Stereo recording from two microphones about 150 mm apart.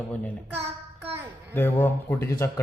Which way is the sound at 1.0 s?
15° right (ahead or behind).